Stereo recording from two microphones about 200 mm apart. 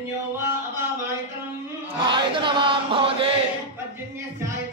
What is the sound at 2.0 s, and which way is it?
Chant, 25° right (ahead or behind).